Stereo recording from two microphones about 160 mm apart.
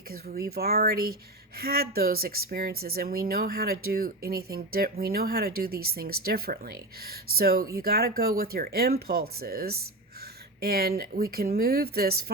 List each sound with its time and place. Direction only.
0.1 s speech: 70° right (ahead or behind)